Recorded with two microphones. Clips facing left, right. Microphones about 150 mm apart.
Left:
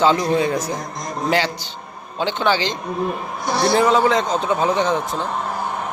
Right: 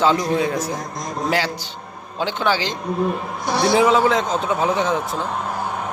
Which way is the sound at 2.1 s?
5° right (ahead or behind).